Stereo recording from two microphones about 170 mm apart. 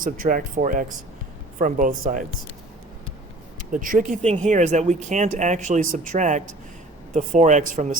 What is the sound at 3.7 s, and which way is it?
Speech, 50° right (ahead or behind).